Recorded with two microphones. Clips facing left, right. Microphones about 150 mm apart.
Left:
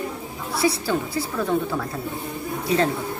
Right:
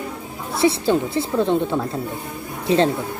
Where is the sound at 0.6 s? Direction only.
25° right (ahead or behind).